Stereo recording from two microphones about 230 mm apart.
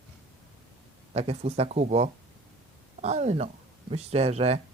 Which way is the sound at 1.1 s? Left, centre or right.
Right.